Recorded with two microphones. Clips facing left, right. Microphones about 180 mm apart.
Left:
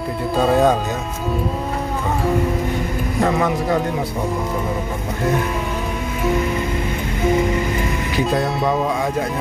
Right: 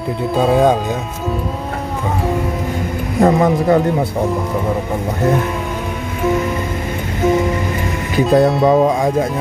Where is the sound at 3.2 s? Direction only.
35° right (ahead or behind).